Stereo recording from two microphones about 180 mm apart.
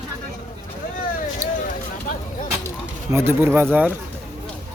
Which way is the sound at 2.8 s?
15° right (ahead or behind).